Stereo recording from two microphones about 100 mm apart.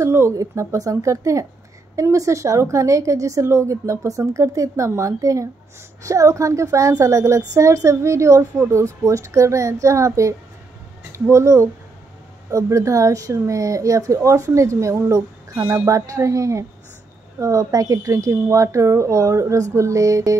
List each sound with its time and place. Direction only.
0.0 s a woman's voice: 30° right (ahead or behind)